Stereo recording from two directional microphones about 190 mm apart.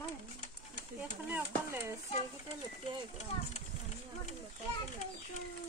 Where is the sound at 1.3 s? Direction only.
10° right (ahead or behind).